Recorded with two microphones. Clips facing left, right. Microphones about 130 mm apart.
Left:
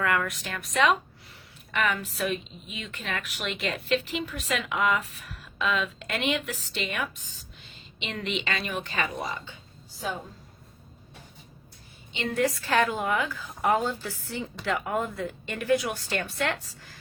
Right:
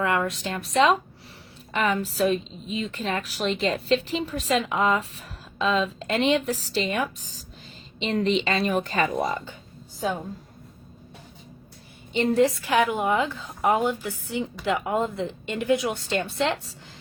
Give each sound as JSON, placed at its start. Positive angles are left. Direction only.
{"t": 0.0, "sound": "a woman's voice", "side_deg": -25}
{"t": 12.1, "sound": "a woman's voice", "side_deg": -35}
{"t": 12.4, "sound": "speech", "side_deg": -20}